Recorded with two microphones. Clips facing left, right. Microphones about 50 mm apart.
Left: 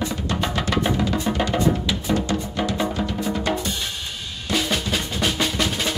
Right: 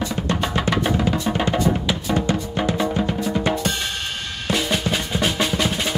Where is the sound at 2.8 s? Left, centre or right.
Centre.